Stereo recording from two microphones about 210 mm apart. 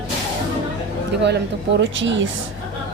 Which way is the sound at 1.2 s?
55° right (ahead or behind).